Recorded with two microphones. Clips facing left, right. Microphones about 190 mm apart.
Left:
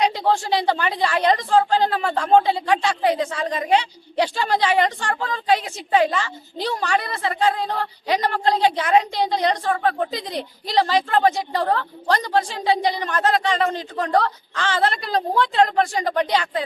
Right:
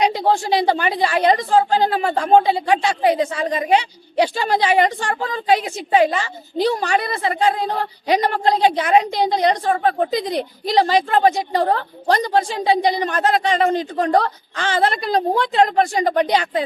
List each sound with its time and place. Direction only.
0.0 s a woman's voice: 15° right (ahead or behind)